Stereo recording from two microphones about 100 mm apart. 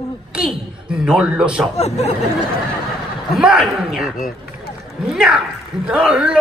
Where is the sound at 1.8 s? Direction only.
90° left.